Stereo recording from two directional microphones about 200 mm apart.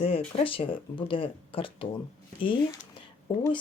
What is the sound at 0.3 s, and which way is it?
Speech, 25° left (ahead or behind).